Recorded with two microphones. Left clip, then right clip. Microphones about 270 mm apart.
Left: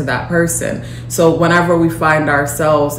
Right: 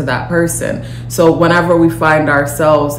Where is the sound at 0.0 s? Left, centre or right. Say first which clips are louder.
Right 1 dB; centre.